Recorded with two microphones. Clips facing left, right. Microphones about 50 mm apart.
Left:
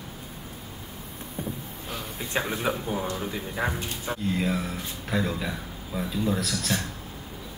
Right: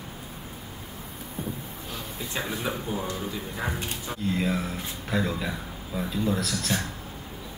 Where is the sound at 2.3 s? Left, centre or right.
Left.